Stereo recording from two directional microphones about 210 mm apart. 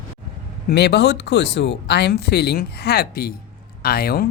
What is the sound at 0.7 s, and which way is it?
Speech, 50° left (ahead or behind).